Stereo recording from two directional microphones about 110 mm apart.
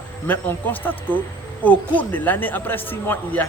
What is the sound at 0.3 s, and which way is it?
A man's voice, 15° left (ahead or behind).